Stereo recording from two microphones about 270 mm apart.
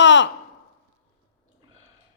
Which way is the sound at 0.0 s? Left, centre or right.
Left.